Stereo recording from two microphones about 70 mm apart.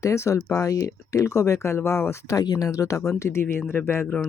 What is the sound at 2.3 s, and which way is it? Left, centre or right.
Speech, left.